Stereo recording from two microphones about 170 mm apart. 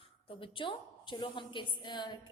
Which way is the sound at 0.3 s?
30° left (ahead or behind).